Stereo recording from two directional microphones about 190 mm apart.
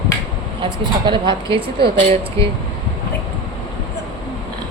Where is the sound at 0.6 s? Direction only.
25° right (ahead or behind).